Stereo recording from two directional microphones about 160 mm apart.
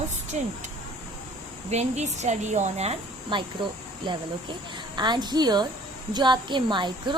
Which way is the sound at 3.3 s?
30° right (ahead or behind).